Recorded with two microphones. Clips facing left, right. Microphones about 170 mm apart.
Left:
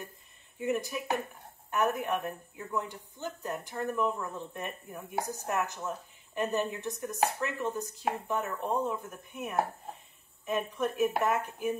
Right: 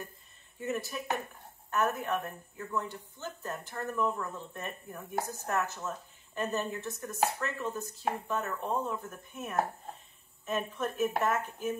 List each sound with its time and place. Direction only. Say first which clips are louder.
0.6 s speech: left 3 dB; 15° left (ahead or behind)